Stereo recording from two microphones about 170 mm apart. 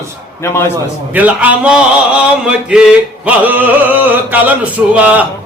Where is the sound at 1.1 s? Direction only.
10° right (ahead or behind).